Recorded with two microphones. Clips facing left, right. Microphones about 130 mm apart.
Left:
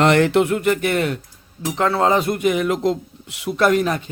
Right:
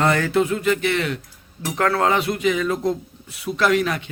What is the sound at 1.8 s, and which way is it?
Speech, 25° left (ahead or behind).